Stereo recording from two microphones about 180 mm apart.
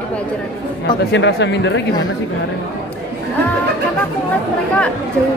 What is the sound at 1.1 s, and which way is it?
Speech, 80° left.